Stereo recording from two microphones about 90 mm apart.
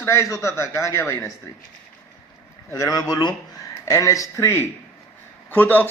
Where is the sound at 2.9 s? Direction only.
45° left (ahead or behind); by 5.8 s 20° left (ahead or behind).